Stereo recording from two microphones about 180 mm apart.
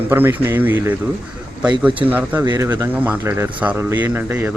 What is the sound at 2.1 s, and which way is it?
Speech, 10° right (ahead or behind).